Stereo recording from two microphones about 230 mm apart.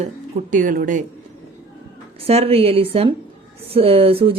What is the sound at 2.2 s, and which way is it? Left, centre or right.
A woman's voice, right.